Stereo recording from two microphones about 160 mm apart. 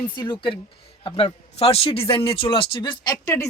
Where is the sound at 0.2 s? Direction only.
30° left (ahead or behind).